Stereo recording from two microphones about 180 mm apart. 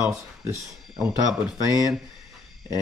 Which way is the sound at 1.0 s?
Centre (ahead or behind).